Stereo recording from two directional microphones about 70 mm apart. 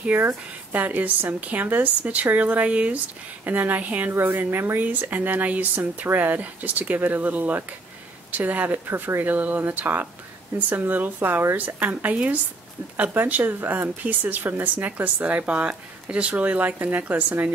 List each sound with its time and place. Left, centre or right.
0.1 s speech: right